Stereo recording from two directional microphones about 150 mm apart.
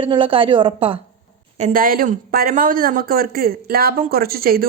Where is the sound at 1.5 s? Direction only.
60° right (ahead or behind).